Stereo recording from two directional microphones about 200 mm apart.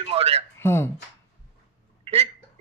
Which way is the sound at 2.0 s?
30° right (ahead or behind).